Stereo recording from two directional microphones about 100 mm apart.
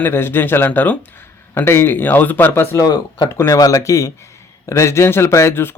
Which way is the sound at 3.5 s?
35° left (ahead or behind).